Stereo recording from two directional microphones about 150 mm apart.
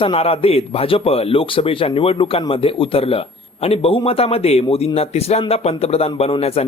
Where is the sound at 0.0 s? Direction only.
40° left (ahead or behind).